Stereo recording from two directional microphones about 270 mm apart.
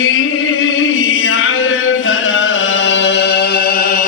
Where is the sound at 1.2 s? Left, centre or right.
Left.